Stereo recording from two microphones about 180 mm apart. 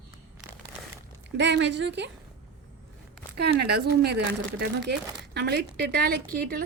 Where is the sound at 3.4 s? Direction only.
65° right (ahead or behind).